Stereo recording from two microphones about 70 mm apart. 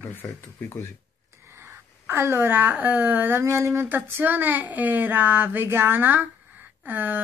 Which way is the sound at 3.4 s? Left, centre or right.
Right.